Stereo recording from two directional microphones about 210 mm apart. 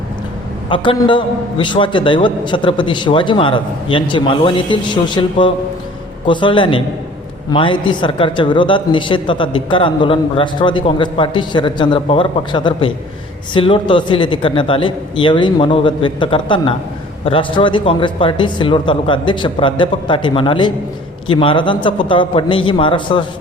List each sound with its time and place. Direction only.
0.7 s speech: 25° left (ahead or behind)